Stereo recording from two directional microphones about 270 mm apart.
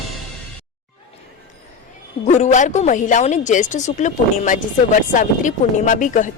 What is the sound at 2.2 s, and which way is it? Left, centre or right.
Speech, left.